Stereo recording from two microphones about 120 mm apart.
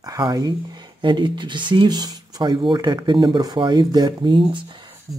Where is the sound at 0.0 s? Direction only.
30° right (ahead or behind).